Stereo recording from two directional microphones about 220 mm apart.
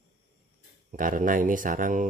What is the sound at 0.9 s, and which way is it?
Speech, 35° right (ahead or behind).